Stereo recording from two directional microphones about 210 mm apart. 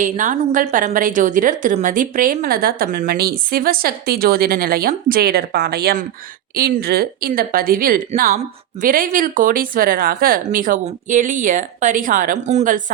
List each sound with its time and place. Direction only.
0.0 s a woman's voice: 40° right (ahead or behind)